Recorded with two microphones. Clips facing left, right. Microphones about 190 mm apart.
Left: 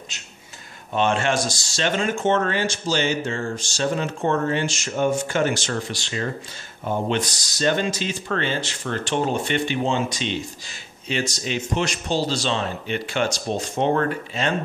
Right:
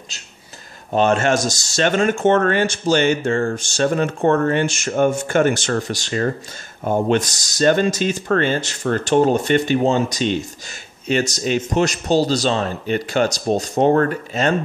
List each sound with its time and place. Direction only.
0.9 s speech: 40° right (ahead or behind)